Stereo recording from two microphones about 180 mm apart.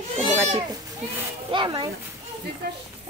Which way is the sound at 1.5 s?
25° right (ahead or behind).